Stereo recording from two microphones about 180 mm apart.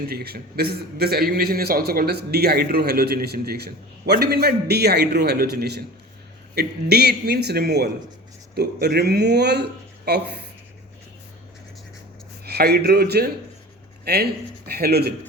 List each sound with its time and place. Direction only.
0.1 s a man's voice: 60° right (ahead or behind)
12.5 s a man's voice: 60° right (ahead or behind)